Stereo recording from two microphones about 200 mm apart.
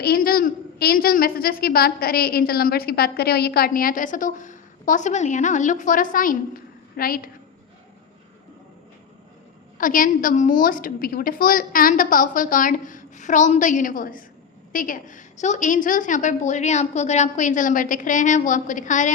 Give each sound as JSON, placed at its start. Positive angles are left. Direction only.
{"t": 0.0, "sound": "a woman's voice", "side_deg": 50}
{"t": 9.7, "sound": "a woman's voice", "side_deg": 45}